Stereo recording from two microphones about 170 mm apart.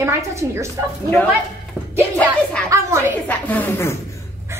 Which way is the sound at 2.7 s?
20° right (ahead or behind).